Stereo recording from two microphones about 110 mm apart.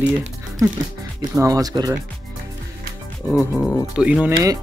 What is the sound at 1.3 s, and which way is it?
Speech, 30° right (ahead or behind).